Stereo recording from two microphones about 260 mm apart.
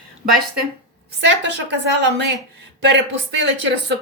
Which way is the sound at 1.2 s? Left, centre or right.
Right.